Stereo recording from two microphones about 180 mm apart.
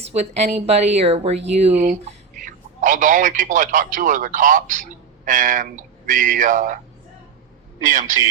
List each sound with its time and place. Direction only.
0.1 s a woman's voice: 35° right (ahead or behind)
1.8 s speech: 50° right (ahead or behind)
7.8 s a man's voice: 45° right (ahead or behind)